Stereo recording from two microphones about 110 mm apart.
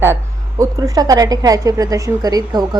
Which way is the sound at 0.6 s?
35° right (ahead or behind).